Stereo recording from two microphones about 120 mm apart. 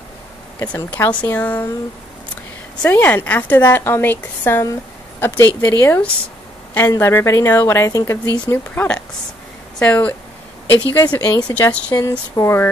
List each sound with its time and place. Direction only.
0.7 s a woman's voice: 15° left (ahead or behind)
2.8 s a woman's voice: 15° left (ahead or behind)
11.1 s speech: 35° left (ahead or behind)
11.5 s a woman's voice: 15° left (ahead or behind)